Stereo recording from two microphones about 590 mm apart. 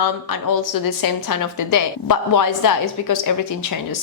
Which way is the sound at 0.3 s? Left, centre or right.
Left.